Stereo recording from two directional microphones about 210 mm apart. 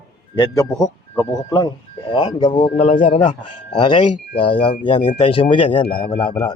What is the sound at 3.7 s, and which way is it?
Speech, 20° left (ahead or behind).